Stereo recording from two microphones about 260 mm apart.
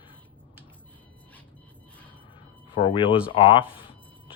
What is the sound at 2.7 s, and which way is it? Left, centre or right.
Speech, centre.